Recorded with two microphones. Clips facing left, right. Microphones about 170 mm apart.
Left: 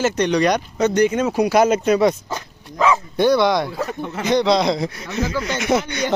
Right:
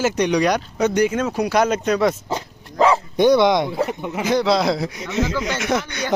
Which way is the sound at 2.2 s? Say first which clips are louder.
Right 3 dB; 30° right (ahead or behind).